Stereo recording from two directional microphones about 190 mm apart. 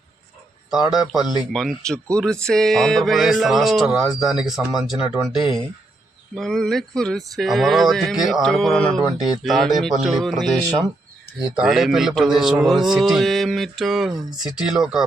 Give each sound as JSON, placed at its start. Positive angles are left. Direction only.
{"t": 0.7, "sound": "speech", "side_deg": 0}
{"t": 6.3, "sound": "speech", "side_deg": 0}